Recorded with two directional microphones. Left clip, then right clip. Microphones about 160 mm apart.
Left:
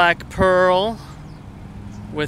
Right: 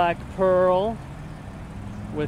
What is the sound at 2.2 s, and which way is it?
Speech, 15° left (ahead or behind).